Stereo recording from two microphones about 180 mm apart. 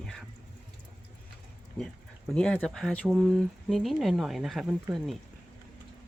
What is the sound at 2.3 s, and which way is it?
Speech, 5° left (ahead or behind).